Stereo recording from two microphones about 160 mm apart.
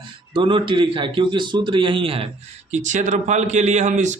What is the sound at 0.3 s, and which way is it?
A man's voice, 30° right (ahead or behind).